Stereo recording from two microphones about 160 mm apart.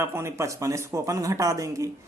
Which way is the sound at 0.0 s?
15° right (ahead or behind).